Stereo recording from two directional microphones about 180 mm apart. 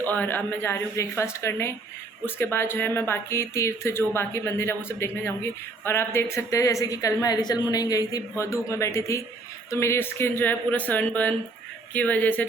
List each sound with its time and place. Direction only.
0.0 s a woman's voice: 10° left (ahead or behind)